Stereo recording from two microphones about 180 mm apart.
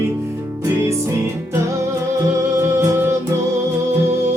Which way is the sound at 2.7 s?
15° right (ahead or behind).